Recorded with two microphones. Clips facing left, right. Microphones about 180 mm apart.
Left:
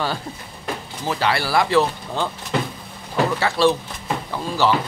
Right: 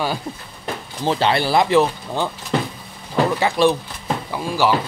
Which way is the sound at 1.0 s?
25° right (ahead or behind).